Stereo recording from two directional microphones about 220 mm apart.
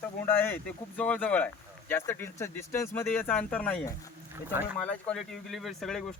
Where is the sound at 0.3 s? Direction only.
10° left (ahead or behind).